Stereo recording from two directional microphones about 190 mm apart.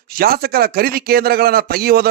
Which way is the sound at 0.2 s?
50° right (ahead or behind).